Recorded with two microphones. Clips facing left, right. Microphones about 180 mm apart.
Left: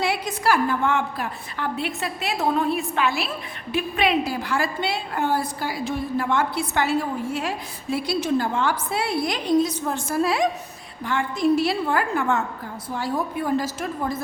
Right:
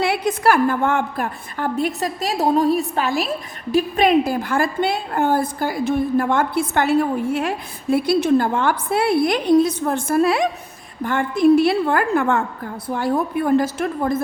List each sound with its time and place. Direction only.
0.0 s a woman's voice: 55° right (ahead or behind)